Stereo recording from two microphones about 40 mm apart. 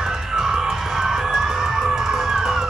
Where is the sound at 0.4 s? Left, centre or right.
Centre.